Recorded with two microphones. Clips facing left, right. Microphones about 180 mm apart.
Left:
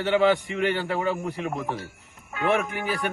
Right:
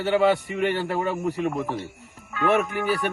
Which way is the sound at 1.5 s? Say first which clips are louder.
Right 2 dB; 30° right (ahead or behind).